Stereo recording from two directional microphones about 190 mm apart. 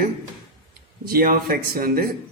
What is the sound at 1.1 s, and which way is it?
A man's voice, 50° right (ahead or behind).